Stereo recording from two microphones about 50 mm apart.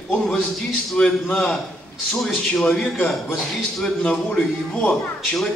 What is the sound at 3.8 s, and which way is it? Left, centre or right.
Speech, centre.